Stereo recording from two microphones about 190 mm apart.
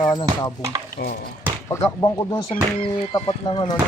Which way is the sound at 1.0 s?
55° left (ahead or behind).